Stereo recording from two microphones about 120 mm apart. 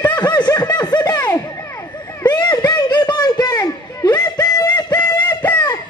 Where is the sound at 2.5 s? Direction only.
35° left (ahead or behind).